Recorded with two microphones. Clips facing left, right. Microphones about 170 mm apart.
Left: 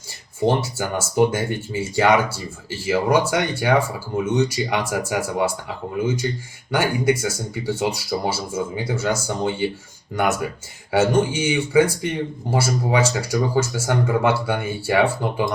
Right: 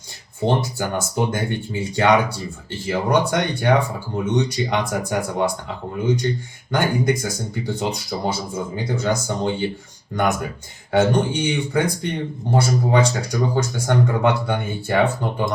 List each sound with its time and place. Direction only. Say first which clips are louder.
0.4 s speech: left 1 dB; 5° left (ahead or behind)